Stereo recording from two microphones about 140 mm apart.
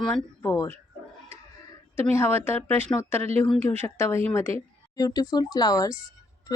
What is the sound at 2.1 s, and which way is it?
Speech, 15° left (ahead or behind).